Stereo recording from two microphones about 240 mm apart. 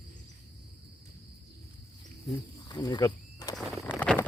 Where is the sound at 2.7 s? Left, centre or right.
Centre.